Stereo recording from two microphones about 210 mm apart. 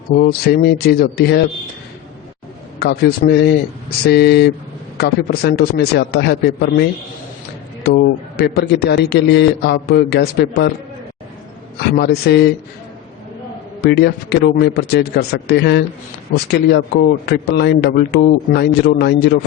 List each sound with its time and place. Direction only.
0.2 s speech: 45° left (ahead or behind)
2.7 s speech: 50° left (ahead or behind)
7.9 s speech: 50° left (ahead or behind)
11.8 s speech: 50° left (ahead or behind)
13.8 s speech: 50° left (ahead or behind)